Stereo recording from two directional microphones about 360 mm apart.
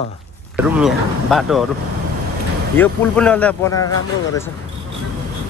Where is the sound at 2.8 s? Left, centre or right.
Centre.